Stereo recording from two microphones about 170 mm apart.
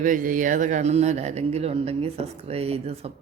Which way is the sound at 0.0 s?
50° right (ahead or behind).